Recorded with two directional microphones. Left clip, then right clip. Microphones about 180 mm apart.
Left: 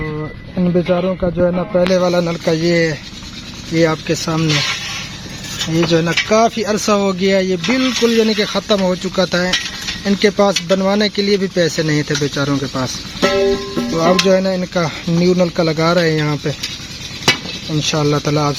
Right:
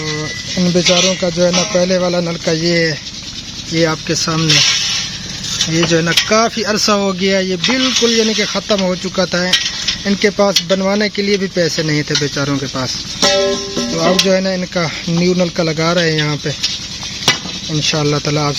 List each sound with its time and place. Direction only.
0.6 s speech: 10° right (ahead or behind)
1.7 s speech: centre (ahead or behind)
5.7 s speech: centre (ahead or behind)
13.1 s music: 40° left (ahead or behind)
13.9 s speech: centre (ahead or behind)
17.7 s speech: centre (ahead or behind)